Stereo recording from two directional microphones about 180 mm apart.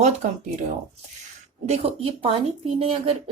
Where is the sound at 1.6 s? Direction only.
35° right (ahead or behind).